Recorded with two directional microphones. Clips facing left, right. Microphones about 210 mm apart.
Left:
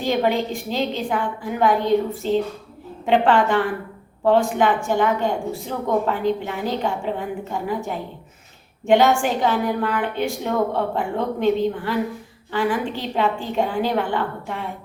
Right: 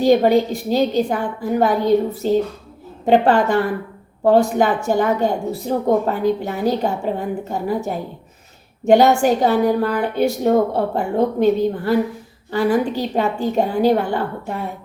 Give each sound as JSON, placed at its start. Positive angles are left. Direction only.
{"t": 0.0, "sound": "a woman's voice", "side_deg": -40}
{"t": 8.9, "sound": "a woman's voice", "side_deg": -40}